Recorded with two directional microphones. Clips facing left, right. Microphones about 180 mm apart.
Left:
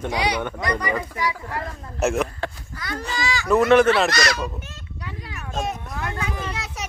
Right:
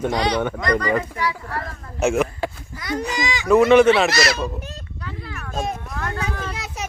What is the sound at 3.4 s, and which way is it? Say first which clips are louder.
Speech: right 3 dB; centre (ahead or behind).